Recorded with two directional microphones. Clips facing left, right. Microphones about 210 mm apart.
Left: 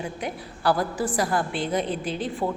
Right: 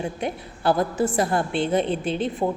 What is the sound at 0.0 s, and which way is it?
A woman's voice, 25° right (ahead or behind).